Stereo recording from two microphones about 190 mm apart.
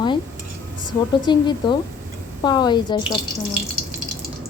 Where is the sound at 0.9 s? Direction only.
20° left (ahead or behind).